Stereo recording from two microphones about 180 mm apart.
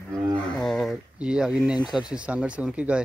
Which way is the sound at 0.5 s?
Centre (ahead or behind).